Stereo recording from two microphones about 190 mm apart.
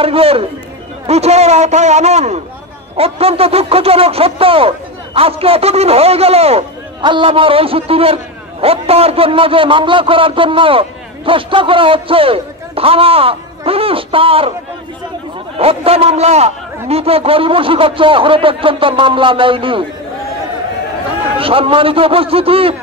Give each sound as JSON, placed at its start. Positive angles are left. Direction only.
{"t": 0.0, "sound": "a man's voice", "side_deg": -30}
{"t": 15.5, "sound": "speech", "side_deg": -30}
{"t": 21.4, "sound": "speech", "side_deg": -30}